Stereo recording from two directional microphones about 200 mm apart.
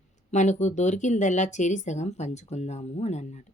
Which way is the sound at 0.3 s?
35° left (ahead or behind).